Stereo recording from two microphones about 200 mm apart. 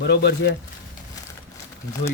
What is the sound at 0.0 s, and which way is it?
Speech, 55° left (ahead or behind).